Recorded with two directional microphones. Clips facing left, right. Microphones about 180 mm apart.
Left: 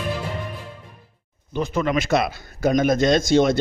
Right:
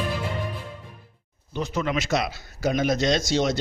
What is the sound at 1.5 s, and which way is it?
A man's voice, 55° left (ahead or behind).